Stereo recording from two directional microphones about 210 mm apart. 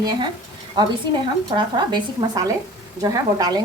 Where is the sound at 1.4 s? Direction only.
20° right (ahead or behind).